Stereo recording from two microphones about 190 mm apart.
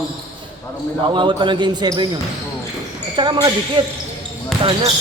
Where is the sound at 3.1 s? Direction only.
25° right (ahead or behind).